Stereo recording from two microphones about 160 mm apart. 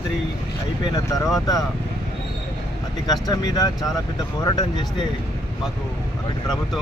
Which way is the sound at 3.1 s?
25° left (ahead or behind).